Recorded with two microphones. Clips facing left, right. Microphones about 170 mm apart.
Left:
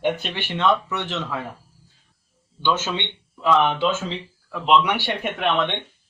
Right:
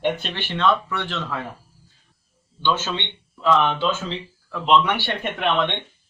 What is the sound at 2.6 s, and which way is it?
A man's voice, 15° left (ahead or behind).